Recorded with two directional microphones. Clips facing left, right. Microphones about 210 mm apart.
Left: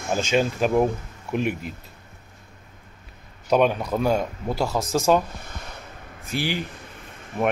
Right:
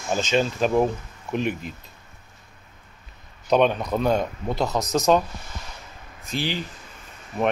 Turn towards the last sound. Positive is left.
turn(degrees=55)  # may be behind; listen again after turning